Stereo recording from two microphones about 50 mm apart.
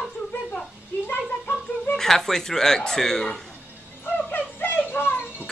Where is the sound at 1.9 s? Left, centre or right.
Centre.